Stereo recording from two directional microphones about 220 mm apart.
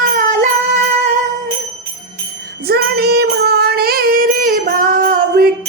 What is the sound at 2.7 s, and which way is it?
Child singing, 45° right (ahead or behind).